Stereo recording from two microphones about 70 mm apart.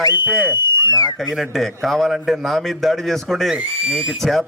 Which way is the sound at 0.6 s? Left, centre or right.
Left.